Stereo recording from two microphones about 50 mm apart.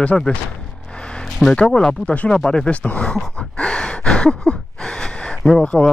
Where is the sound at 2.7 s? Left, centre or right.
Left.